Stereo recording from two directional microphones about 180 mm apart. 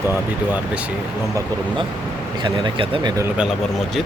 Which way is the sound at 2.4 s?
30° right (ahead or behind).